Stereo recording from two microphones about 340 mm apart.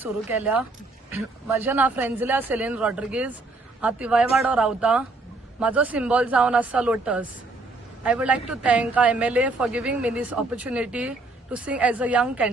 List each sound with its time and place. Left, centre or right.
0.0 s a woman's voice: centre
1.6 s a woman's voice: centre